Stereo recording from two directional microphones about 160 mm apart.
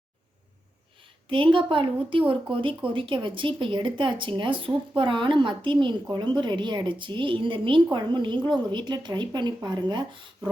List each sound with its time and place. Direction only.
1.3 s a woman's voice: 35° right (ahead or behind)